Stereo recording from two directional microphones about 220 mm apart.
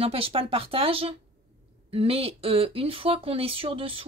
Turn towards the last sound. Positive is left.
turn(degrees=-25)  # may be behind; listen again after turning